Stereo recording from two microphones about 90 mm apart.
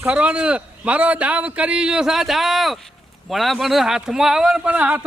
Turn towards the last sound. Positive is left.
turn(degrees=-20)  # may be behind; listen again after turning